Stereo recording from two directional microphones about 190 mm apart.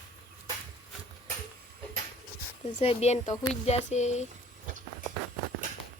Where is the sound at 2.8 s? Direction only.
35° left (ahead or behind).